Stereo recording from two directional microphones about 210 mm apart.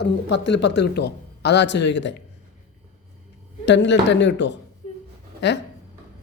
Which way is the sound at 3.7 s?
60° left (ahead or behind).